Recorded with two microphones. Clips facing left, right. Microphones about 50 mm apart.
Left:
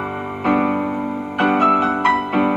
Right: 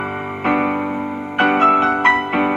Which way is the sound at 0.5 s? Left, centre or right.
Right.